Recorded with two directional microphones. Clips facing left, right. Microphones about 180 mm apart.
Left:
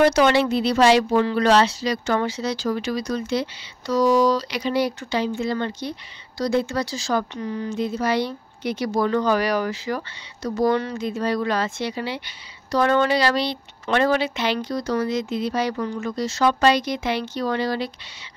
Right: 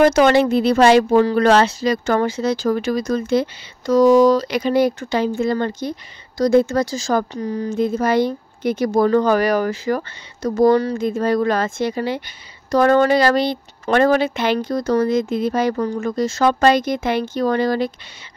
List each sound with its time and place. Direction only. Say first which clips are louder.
0.0 s speech: right 4 dB; 50° right (ahead or behind)
7.7 s speech: right 6 dB; 50° right (ahead or behind)